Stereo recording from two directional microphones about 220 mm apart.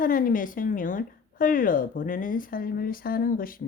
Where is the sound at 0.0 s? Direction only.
40° left (ahead or behind).